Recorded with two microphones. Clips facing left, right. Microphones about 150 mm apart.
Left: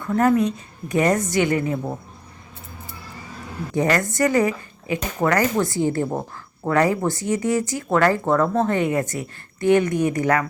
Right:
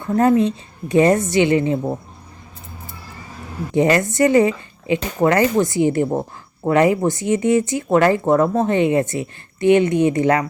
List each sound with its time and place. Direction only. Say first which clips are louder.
0.0 s speech: right 3 dB; 25° right (ahead or behind)
3.7 s speech: right 5 dB; 20° right (ahead or behind)